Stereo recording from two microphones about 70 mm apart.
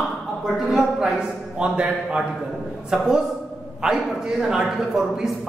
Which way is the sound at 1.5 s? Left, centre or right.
Centre.